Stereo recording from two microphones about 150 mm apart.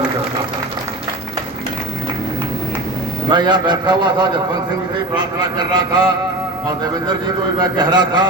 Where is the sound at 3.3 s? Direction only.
30° right (ahead or behind).